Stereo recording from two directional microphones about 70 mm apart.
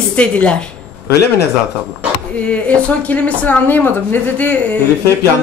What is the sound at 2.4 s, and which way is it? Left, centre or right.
A woman's voice, centre.